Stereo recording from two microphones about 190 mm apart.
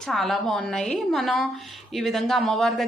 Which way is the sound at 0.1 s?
Centre (ahead or behind).